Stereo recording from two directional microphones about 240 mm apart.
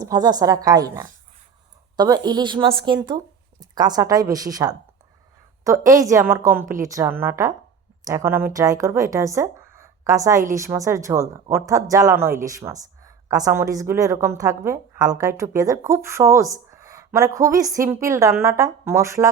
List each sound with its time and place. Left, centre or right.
0.0 s a woman's voice: centre